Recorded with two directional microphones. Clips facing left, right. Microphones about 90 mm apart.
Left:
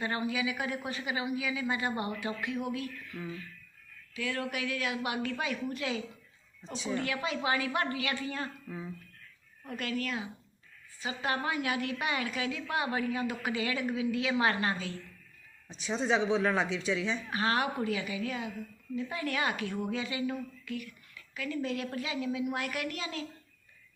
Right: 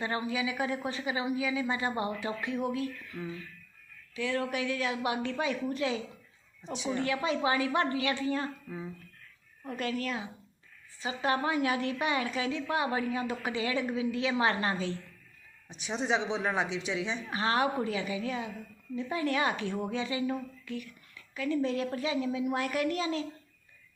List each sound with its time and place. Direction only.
0.0 s a woman's voice: 30° right (ahead or behind)
6.6 s speech: 15° right (ahead or behind)
7.0 s a woman's voice: 30° right (ahead or behind)
9.6 s a woman's voice: 35° right (ahead or behind)
15.8 s speech: 20° right (ahead or behind)
17.3 s a woman's voice: 30° right (ahead or behind)